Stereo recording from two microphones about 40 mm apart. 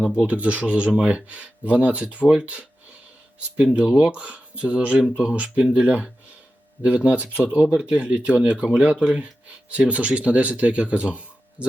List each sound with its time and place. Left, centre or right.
0.3 s speech: right